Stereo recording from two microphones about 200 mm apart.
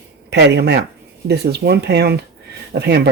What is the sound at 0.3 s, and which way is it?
Speech, 55° right (ahead or behind).